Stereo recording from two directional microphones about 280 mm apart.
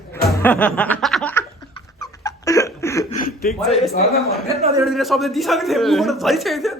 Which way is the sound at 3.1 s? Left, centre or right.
Left.